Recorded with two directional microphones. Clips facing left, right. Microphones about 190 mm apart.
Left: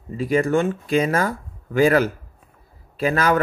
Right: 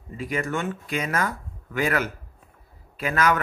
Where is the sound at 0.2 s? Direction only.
35° left (ahead or behind).